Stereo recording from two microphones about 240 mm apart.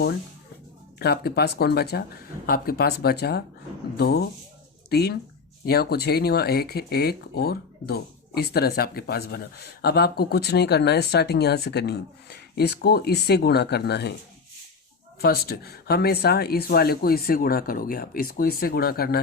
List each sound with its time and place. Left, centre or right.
0.9 s a man's voice: left
15.2 s speech: left